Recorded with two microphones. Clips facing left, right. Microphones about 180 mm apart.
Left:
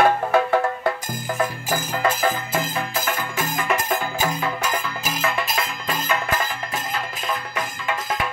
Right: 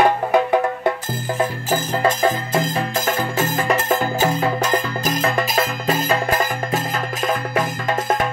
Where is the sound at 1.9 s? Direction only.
30° right (ahead or behind).